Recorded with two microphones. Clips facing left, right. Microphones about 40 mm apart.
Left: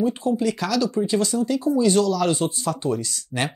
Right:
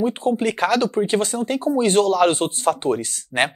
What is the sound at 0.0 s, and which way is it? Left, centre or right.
Speech, right.